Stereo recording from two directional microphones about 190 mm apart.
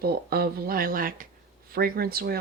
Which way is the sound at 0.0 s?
55° right (ahead or behind).